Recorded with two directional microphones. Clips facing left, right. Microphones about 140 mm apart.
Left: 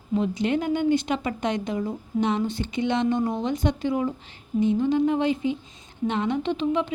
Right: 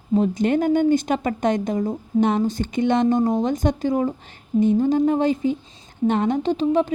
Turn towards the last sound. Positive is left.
turn(degrees=-40)  # may be behind; listen again after turning